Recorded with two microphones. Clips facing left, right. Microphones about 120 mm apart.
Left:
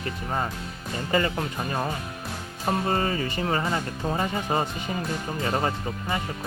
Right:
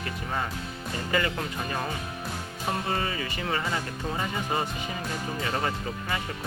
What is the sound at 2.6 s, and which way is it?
Speech, 40° left (ahead or behind).